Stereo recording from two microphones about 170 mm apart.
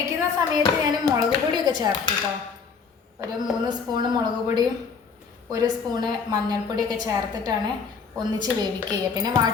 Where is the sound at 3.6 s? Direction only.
25° right (ahead or behind).